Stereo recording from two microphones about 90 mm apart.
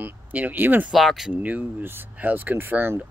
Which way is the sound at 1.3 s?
15° right (ahead or behind).